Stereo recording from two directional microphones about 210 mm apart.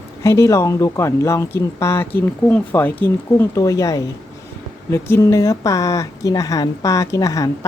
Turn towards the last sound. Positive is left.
turn(degrees=15)  # may be behind; listen again after turning